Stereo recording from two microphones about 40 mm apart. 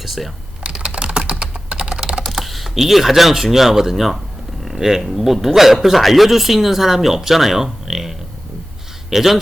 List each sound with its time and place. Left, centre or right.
0.0 s speech: centre
0.7 s typing: right
2.2 s typing: centre
2.6 s speech: centre